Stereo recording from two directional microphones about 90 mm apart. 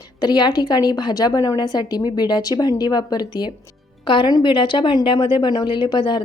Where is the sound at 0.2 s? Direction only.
50° left (ahead or behind).